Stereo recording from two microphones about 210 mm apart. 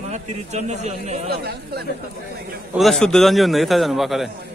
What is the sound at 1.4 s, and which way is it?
Speech, 50° right (ahead or behind).